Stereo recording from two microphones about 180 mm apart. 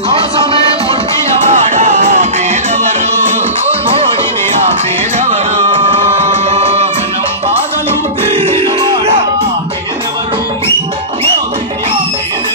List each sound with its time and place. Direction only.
1.5 s music: 40° right (ahead or behind)
5.2 s music: 35° right (ahead or behind)
8.3 s music: 30° right (ahead or behind)